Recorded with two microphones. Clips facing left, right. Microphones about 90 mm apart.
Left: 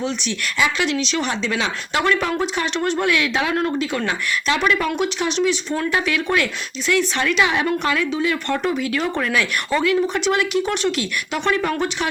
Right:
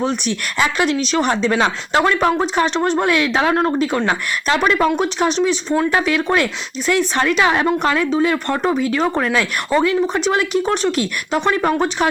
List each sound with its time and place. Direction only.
0.0 s speech: 45° right (ahead or behind)